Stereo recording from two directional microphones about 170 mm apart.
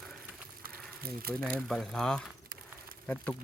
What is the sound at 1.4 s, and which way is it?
Speech, centre (ahead or behind).